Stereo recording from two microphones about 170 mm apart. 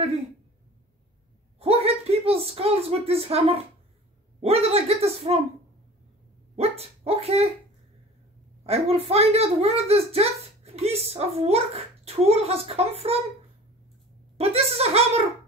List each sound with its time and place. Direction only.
1.6 s a sound: 35° right (ahead or behind)
4.4 s speech: 35° right (ahead or behind)
6.5 s speech: 35° right (ahead or behind)
8.6 s speech: 35° right (ahead or behind)
14.3 s speech: 35° right (ahead or behind)